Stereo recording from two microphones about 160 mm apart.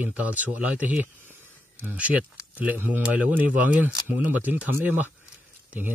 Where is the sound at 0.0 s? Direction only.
10° right (ahead or behind).